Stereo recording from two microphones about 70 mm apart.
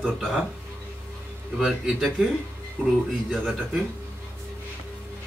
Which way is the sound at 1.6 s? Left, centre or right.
Centre.